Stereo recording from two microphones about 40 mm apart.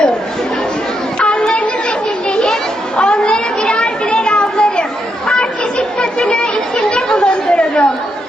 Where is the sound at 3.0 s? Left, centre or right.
Left.